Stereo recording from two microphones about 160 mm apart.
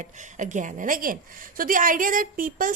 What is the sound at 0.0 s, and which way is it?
A woman's voice, 50° right (ahead or behind).